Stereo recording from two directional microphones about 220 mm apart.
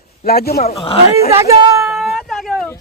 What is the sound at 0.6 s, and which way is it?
Speech, 25° left (ahead or behind).